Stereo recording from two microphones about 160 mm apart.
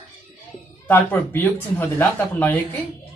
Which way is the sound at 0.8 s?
10° left (ahead or behind).